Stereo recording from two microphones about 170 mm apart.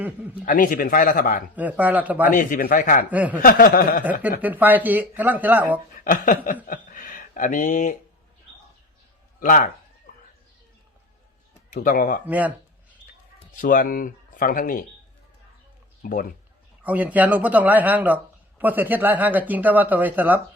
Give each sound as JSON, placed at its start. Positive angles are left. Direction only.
{"t": 0.0, "sound": "speech", "side_deg": -10}
{"t": 0.4, "sound": "speech", "side_deg": 50}
{"t": 1.5, "sound": "speech", "side_deg": -10}
{"t": 2.3, "sound": "speech", "side_deg": 50}
{"t": 3.1, "sound": "speech", "side_deg": -10}
{"t": 3.4, "sound": "a sound", "side_deg": 60}
{"t": 4.0, "sound": "speech", "side_deg": -10}
{"t": 6.1, "sound": "speech", "side_deg": 55}
{"t": 9.4, "sound": "speech", "side_deg": 50}
{"t": 10.1, "sound": "a sound", "side_deg": 60}
{"t": 11.7, "sound": "speech", "side_deg": 50}
{"t": 12.2, "sound": "speech", "side_deg": -10}
{"t": 13.6, "sound": "speech", "side_deg": 50}
{"t": 16.8, "sound": "speech", "side_deg": -10}